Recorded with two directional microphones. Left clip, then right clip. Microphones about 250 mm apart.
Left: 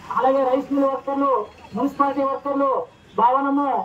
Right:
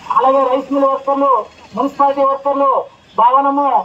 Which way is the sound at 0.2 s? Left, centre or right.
Right.